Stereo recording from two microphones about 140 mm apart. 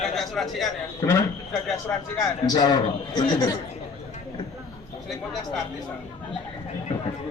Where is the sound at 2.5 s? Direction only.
30° left (ahead or behind).